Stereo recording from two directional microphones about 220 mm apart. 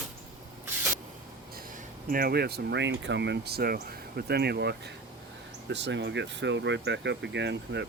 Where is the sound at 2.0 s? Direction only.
40° right (ahead or behind).